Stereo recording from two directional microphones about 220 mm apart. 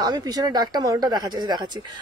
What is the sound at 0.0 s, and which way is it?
Speech, 20° right (ahead or behind).